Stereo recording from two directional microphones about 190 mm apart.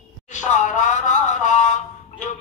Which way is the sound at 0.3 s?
40° left (ahead or behind).